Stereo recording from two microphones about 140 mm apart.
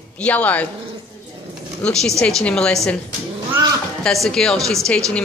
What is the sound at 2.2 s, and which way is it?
Speech, 5° left (ahead or behind).